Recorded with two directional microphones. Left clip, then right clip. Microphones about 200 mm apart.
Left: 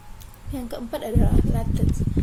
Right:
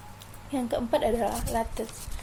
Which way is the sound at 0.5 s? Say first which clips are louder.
Right 4 dB; 20° left (ahead or behind).